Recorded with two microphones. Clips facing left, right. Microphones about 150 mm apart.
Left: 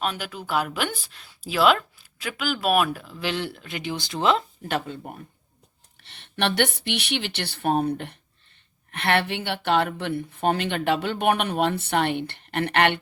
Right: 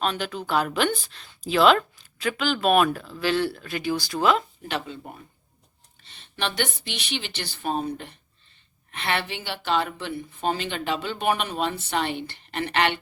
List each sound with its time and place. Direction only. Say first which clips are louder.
0.0 s speech: right 2 dB; 10° left (ahead or behind); by 4.4 s 25° left (ahead or behind)
4.7 s speech: left 3 dB; 55° left (ahead or behind)
6.0 s speech: left 4 dB; 65° left (ahead or behind)